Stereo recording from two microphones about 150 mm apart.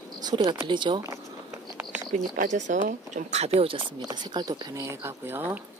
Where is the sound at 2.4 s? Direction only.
55° right (ahead or behind); by 3.9 s 40° right (ahead or behind).